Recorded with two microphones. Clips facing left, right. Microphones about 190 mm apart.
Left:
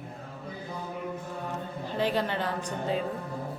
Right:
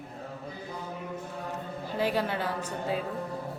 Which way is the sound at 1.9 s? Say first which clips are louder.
Even; 10° right (ahead or behind).